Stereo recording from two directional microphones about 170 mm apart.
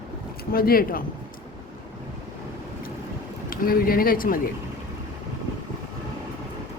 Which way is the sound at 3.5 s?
60° left (ahead or behind).